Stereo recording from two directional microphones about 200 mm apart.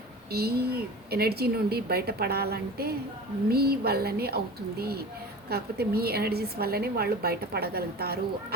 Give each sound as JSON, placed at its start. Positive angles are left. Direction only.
{"t": 0.3, "sound": "a woman's voice", "side_deg": -50}